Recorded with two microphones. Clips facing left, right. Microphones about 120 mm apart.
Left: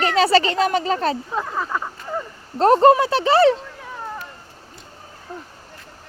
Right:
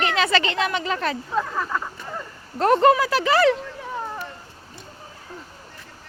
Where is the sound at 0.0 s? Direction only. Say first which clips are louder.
Left 5 dB; 35° left (ahead or behind).